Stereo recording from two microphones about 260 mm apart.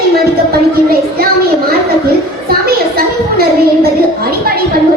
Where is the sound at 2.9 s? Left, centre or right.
Right.